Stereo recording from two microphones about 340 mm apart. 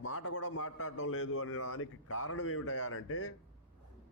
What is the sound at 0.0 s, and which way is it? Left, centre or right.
A man's voice, left.